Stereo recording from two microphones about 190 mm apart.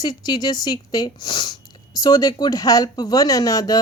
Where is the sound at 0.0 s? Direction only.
20° left (ahead or behind).